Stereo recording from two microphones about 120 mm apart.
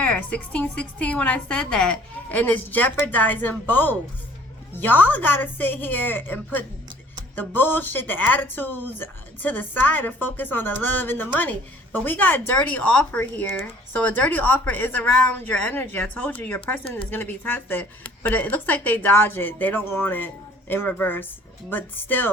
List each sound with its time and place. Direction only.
0.0 s speech: 10° left (ahead or behind)